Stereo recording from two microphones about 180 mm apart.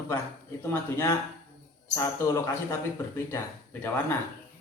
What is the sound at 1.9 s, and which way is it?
Speech, 15° left (ahead or behind).